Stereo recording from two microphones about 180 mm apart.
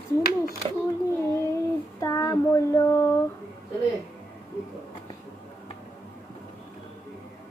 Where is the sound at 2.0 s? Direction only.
20° left (ahead or behind).